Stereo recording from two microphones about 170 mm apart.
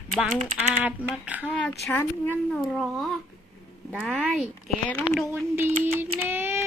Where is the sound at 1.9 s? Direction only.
10° left (ahead or behind).